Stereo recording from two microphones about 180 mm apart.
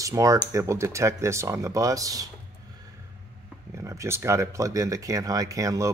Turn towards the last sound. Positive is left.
turn(degrees=-20)  # may be behind; listen again after turning